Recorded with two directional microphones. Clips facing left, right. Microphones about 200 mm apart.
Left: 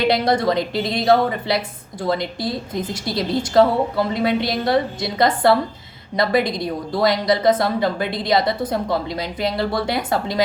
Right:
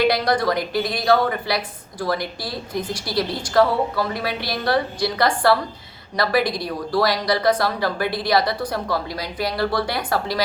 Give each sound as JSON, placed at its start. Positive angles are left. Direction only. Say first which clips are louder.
{"t": 0.0, "sound": "speech", "louder": "left 1 dB", "side_deg": 25}